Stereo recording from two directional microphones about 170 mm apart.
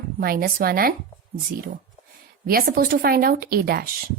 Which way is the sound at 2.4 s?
60° right (ahead or behind).